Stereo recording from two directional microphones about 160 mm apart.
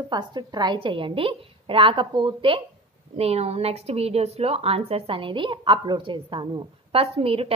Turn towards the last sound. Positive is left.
turn(degrees=-35)  # may be behind; listen again after turning